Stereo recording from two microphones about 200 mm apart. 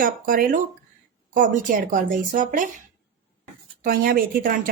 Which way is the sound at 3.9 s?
45° right (ahead or behind).